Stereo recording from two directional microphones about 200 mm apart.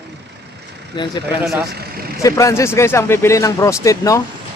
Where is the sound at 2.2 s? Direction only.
15° left (ahead or behind).